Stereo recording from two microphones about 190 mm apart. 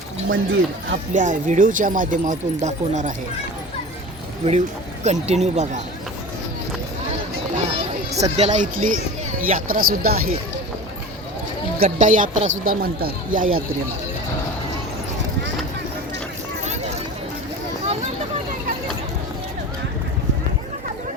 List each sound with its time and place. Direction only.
0.3 s speech: 90° right
1.1 s speech: 40° right (ahead or behind)
5.0 s speech: 35° right (ahead or behind)
7.5 s a sound: 35° right (ahead or behind)
9.5 s speech: 45° right (ahead or behind)
11.8 s speech: 40° right (ahead or behind)